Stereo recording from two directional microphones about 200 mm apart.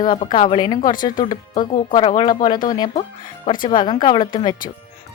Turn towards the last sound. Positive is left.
turn(degrees=20)  # may be behind; listen again after turning